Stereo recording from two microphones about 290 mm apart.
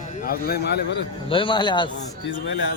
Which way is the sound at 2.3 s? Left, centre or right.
Left.